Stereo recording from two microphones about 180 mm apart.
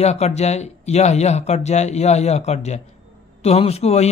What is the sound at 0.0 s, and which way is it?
Speech, 35° left (ahead or behind).